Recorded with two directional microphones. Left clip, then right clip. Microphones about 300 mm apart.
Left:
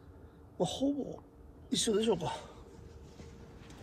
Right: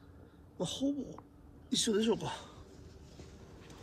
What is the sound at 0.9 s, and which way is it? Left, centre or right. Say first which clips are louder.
Speech: left 2 dB; centre.